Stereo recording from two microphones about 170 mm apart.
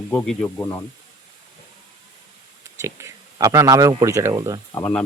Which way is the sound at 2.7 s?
15° right (ahead or behind).